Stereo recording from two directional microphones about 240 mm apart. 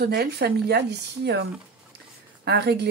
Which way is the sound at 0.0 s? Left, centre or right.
Right.